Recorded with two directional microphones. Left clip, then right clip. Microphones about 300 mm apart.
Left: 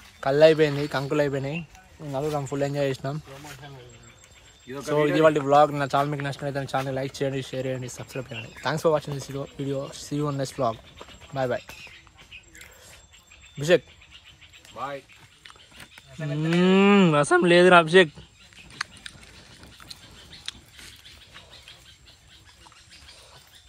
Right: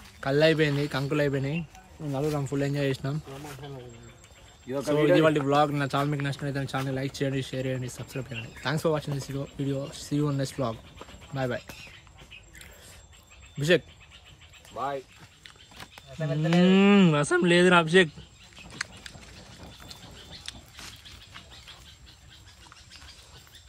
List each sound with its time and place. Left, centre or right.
0.2 s speech: centre
4.8 s speech: centre
13.6 s speech: centre
14.7 s speech: centre
15.8 s livestock: right
16.5 s speech: centre
20.5 s a sound: centre